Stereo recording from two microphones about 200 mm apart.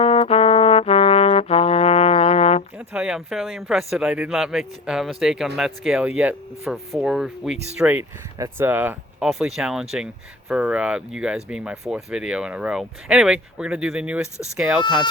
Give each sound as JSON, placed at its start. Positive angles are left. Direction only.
{"t": 0.0, "sound": "brass instrument", "side_deg": 30}
{"t": 2.7, "sound": "speech", "side_deg": -5}